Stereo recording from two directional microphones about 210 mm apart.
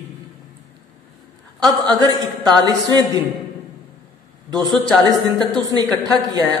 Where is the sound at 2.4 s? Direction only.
20° right (ahead or behind).